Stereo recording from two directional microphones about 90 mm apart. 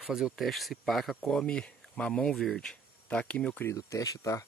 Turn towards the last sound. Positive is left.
turn(degrees=40)  # may be behind; listen again after turning